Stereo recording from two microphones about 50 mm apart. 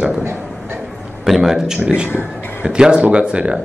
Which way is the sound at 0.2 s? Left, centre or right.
Right.